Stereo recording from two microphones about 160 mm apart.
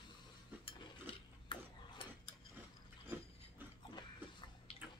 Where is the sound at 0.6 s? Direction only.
35° left (ahead or behind).